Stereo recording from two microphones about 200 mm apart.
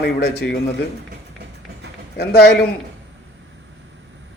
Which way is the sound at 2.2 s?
55° left (ahead or behind).